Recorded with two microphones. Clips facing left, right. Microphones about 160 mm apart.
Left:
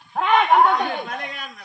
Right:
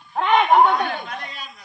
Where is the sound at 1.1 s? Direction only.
55° left (ahead or behind).